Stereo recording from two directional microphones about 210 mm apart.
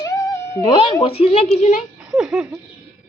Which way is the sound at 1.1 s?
30° left (ahead or behind).